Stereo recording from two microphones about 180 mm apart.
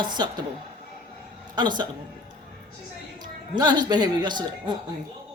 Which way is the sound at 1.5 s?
25° right (ahead or behind).